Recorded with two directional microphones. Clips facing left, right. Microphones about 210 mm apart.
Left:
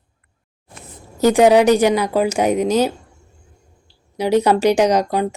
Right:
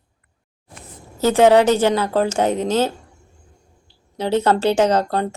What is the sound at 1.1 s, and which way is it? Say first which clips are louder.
Speech: left 1 dB; 15° left (ahead or behind).